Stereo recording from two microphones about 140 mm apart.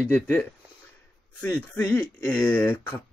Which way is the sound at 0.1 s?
10° left (ahead or behind).